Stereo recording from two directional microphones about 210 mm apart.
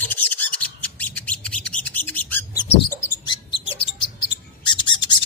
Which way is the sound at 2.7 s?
25° left (ahead or behind).